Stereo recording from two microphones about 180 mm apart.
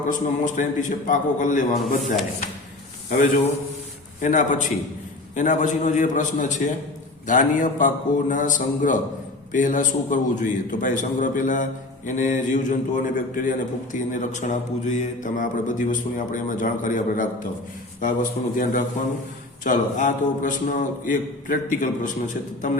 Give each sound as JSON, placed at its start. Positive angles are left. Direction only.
{"t": 0.1, "sound": "a man's voice", "side_deg": 45}
{"t": 4.2, "sound": "a man's voice", "side_deg": 45}